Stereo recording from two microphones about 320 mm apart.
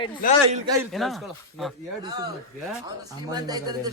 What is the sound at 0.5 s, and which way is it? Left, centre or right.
Speech, centre.